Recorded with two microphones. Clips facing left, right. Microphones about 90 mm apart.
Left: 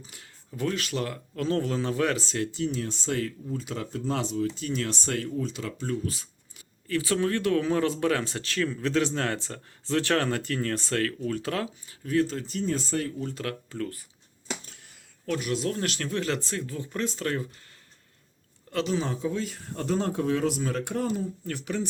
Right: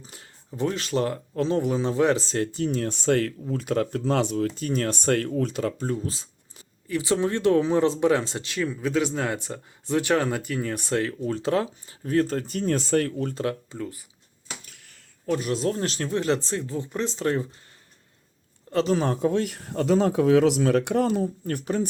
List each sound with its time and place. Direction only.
0.0 s speech: 30° right (ahead or behind)
1.5 s speech: 15° right (ahead or behind)
2.1 s speech: 40° right (ahead or behind); by 5.6 s 55° right (ahead or behind)
5.6 s speech: 40° right (ahead or behind); by 13.3 s 60° right (ahead or behind)
13.3 s speech: 25° right (ahead or behind)
15.4 s speech: 35° right (ahead or behind)
18.9 s speech: 55° right (ahead or behind); by 21.2 s 70° right (ahead or behind)
21.4 s speech: 40° right (ahead or behind)